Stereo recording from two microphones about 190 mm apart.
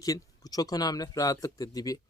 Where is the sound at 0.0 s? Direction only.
20° left (ahead or behind).